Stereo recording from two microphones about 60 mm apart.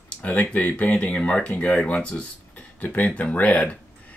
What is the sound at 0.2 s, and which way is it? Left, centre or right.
Speech, left.